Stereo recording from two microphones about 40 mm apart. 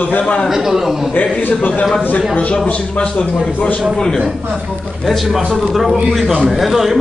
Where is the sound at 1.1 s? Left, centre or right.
Left.